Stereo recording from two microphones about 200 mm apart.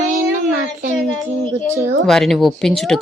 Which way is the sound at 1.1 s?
Centre (ahead or behind).